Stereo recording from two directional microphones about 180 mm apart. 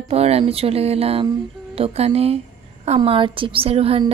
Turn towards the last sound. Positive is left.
turn(degrees=-35)  # may be behind; listen again after turning